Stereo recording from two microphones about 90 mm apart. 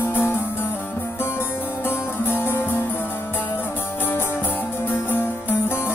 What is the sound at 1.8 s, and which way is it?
Music, 25° left (ahead or behind).